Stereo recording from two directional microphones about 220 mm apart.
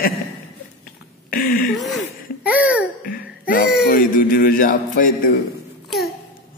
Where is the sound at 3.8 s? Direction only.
40° left (ahead or behind).